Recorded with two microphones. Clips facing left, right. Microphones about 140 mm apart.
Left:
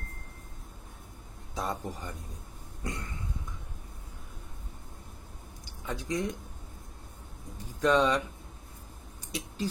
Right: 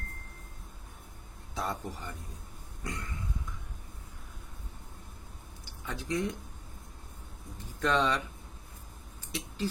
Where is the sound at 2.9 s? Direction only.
25° left (ahead or behind).